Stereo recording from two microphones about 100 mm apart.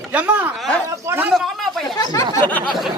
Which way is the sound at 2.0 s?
35° left (ahead or behind).